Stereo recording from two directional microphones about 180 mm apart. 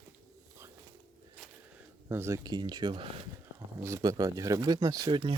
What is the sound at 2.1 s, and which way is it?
Speech, 15° right (ahead or behind).